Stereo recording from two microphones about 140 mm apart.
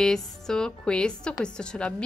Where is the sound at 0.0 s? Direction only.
5° left (ahead or behind).